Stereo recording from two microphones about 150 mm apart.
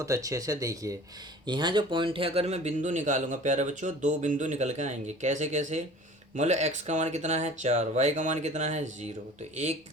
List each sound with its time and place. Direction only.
0.0 s speech: 20° right (ahead or behind); by 9.0 s 50° right (ahead or behind)